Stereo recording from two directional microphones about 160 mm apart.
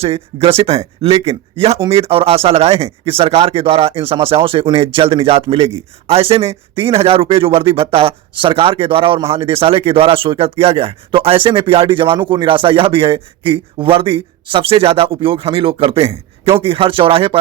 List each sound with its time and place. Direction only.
0.0 s speech: 35° right (ahead or behind)